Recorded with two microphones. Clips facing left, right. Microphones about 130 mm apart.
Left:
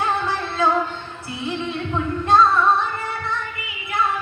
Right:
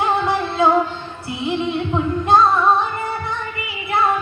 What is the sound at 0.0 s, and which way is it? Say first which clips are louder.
Music: right 4 dB; 20° right (ahead or behind).